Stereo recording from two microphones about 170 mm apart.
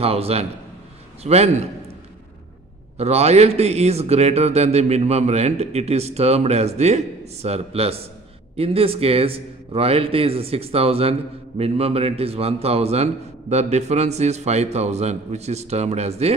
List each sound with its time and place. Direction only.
0.0 s a man's voice: 35° right (ahead or behind)
3.0 s a man's voice: 40° right (ahead or behind)